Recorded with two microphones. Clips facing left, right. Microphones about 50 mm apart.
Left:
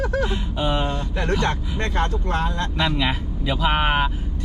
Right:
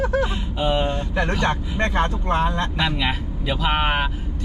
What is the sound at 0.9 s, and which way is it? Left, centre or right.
Speech, right.